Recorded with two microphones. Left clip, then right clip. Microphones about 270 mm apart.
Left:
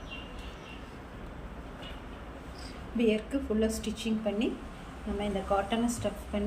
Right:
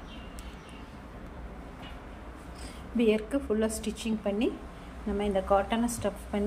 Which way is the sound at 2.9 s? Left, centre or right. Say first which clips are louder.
Right 2 dB; centre.